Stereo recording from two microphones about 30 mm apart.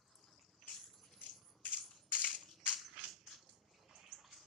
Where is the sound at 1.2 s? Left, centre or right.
Left.